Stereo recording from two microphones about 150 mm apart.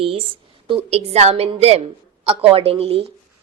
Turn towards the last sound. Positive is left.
turn(degrees=-40)  # may be behind; listen again after turning